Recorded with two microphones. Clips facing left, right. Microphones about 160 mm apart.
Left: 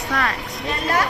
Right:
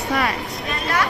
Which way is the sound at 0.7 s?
40° left (ahead or behind).